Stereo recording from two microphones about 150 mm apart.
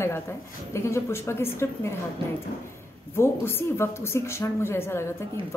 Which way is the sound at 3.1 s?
15° left (ahead or behind).